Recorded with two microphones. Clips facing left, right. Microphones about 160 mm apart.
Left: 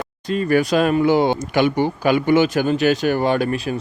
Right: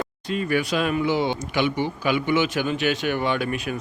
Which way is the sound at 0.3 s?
40° left (ahead or behind).